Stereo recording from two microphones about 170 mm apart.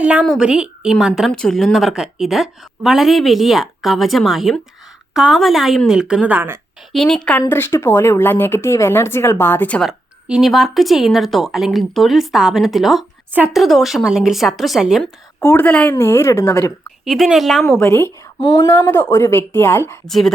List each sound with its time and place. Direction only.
0.0 s a woman's voice: 5° right (ahead or behind)
6.9 s a woman's voice: 5° left (ahead or behind)
15.4 s speech: 15° left (ahead or behind)
17.1 s a woman's voice: centre (ahead or behind)
17.7 s speech: 15° left (ahead or behind)
18.3 s speech: 25° left (ahead or behind)
18.7 s speech: 10° left (ahead or behind)
20.1 s a woman's voice: centre (ahead or behind)